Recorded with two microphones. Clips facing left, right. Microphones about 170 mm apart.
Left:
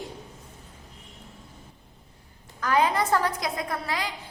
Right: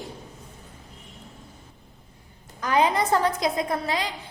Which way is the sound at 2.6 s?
20° right (ahead or behind).